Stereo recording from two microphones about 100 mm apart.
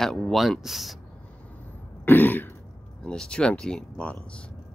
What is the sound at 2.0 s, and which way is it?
Throat clearing, 20° left (ahead or behind).